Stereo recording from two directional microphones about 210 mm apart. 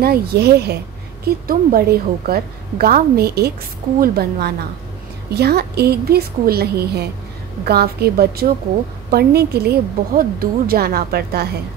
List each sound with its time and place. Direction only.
0.0 s a woman's voice: 50° right (ahead or behind)